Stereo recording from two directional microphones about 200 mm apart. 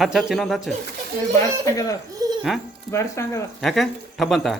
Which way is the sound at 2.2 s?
20° right (ahead or behind).